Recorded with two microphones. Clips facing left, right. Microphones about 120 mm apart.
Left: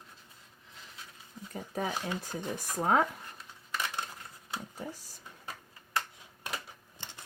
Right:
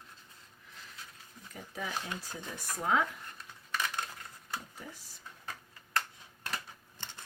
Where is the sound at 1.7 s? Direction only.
45° left (ahead or behind).